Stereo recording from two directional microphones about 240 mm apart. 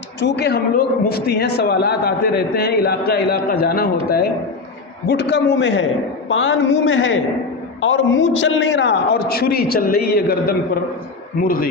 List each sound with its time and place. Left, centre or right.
0.2 s a man's voice: left
11.4 s a man's voice: left